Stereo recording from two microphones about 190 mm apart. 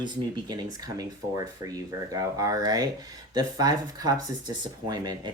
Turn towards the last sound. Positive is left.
turn(degrees=-20)  # may be behind; listen again after turning